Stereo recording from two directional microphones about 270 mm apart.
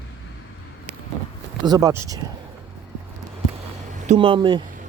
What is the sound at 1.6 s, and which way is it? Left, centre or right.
Speech, centre.